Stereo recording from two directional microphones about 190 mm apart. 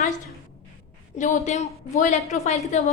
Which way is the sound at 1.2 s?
40° left (ahead or behind).